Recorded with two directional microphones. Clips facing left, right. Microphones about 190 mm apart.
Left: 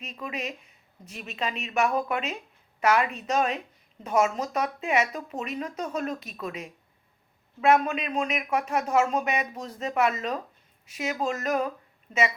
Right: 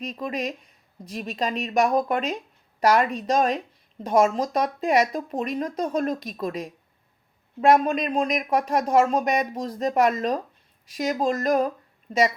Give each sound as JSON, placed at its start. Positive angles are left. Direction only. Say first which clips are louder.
{"t": 0.0, "sound": "speech", "louder": "right 6 dB", "side_deg": -35}